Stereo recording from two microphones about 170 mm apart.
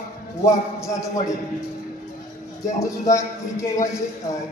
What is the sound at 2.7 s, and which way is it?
Speech, 20° left (ahead or behind).